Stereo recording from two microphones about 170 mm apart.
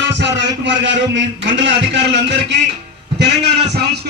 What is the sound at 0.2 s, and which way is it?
A man's voice, 90° right.